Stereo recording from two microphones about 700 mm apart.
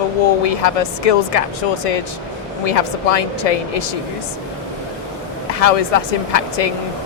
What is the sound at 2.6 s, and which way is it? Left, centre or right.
Speech, left.